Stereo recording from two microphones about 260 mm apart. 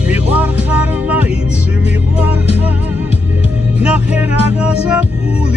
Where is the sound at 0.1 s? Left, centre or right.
Centre.